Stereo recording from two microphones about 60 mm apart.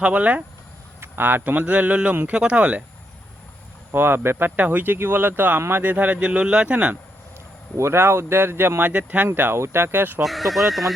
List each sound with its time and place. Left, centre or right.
0.0 s speech: right
1.0 s speech: right
3.9 s speech: right
4.5 s speech: right
7.8 s speech: right
8.8 s speech: right
10.2 s speech: centre